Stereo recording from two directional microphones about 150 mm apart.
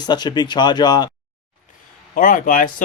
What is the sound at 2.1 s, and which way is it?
Speech, 60° left (ahead or behind).